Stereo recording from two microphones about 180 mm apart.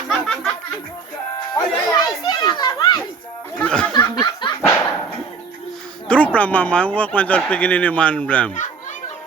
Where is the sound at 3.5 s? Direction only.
5° left (ahead or behind).